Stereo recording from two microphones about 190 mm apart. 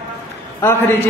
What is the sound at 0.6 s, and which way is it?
Speech, 10° left (ahead or behind).